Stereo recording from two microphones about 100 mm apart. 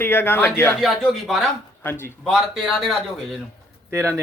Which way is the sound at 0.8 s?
Centre (ahead or behind).